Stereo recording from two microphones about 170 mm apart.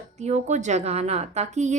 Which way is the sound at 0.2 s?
40° right (ahead or behind).